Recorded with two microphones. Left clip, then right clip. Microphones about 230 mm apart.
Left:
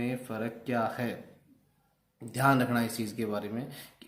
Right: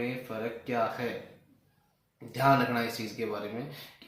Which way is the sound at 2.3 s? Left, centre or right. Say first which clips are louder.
Right 1 dB; left.